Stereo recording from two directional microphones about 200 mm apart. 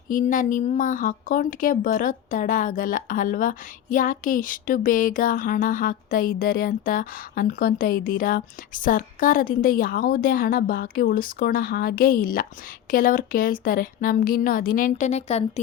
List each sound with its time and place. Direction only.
0.1 s speech: 40° left (ahead or behind)